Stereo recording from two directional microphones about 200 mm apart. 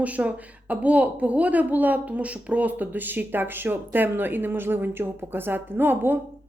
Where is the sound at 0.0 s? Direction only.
5° right (ahead or behind).